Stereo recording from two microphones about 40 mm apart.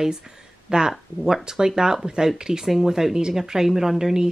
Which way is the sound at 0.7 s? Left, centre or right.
Centre.